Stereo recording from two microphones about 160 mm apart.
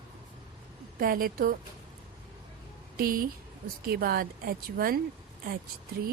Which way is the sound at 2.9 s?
65° right (ahead or behind).